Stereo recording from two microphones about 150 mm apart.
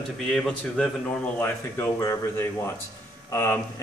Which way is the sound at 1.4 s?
15° left (ahead or behind).